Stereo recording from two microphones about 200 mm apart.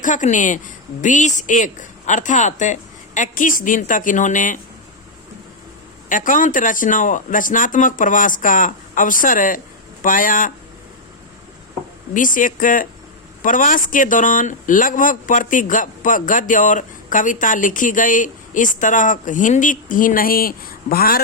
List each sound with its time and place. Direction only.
0.0 s speech: 40° left (ahead or behind)
6.1 s speech: 40° left (ahead or behind)
12.1 s speech: 40° left (ahead or behind)